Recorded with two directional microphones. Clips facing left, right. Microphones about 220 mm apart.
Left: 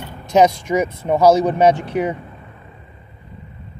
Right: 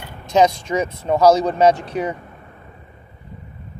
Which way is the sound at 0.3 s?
15° left (ahead or behind).